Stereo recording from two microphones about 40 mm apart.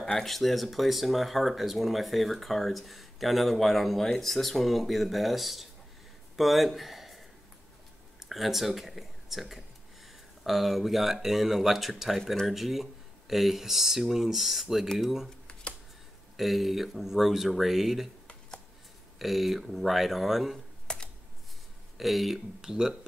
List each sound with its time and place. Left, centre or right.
0.2 s speech: centre
6.3 s a sound: centre
8.2 s speech: centre
16.3 s speech: centre
19.1 s speech: centre
20.8 s computer keyboard: centre
21.9 s speech: centre
22.6 s speech: centre